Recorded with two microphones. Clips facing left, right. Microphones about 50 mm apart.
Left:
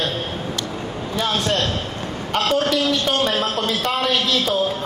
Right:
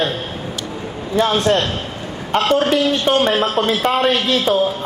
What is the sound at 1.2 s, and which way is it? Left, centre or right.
A man's voice, right.